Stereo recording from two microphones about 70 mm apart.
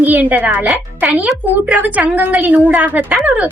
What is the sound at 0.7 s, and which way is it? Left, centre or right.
Speech, centre.